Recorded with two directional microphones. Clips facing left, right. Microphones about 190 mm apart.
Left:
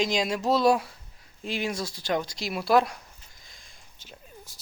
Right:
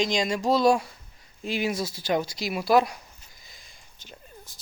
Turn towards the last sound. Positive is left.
turn(degrees=5)  # may be behind; listen again after turning